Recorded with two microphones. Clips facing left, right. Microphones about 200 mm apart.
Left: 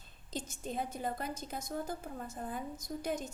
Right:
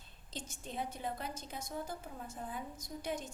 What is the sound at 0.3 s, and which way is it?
A woman's voice, 45° left (ahead or behind).